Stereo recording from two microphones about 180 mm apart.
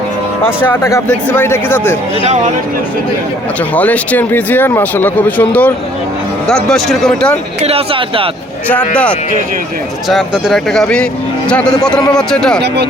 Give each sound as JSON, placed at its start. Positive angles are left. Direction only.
{"t": 0.4, "sound": "speech", "side_deg": 10}
{"t": 3.8, "sound": "speech", "side_deg": 10}
{"t": 7.6, "sound": "speech", "side_deg": -35}
{"t": 8.6, "sound": "speech", "side_deg": 5}
{"t": 10.1, "sound": "speech", "side_deg": 0}
{"t": 12.6, "sound": "speech", "side_deg": -70}